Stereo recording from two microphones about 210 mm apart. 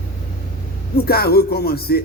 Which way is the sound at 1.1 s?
45° left (ahead or behind).